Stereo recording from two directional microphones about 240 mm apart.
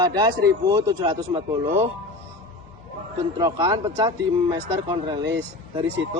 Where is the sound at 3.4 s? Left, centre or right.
Centre.